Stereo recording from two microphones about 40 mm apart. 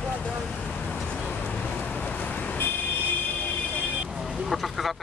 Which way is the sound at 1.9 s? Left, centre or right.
Left.